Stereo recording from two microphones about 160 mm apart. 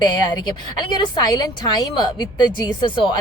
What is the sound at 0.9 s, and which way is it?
A woman's voice, 25° left (ahead or behind).